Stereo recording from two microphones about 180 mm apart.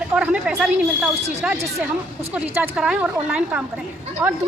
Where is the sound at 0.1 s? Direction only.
5° right (ahead or behind).